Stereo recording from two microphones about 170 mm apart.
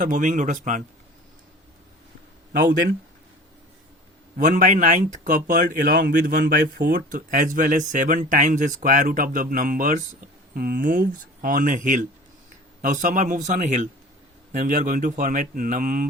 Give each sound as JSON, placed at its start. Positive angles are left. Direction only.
{"t": 0.0, "sound": "speech", "side_deg": -50}
{"t": 4.4, "sound": "speech", "side_deg": -50}